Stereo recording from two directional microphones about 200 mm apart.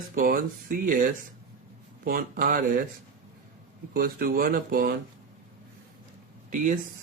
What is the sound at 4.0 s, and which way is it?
Speech, 45° right (ahead or behind).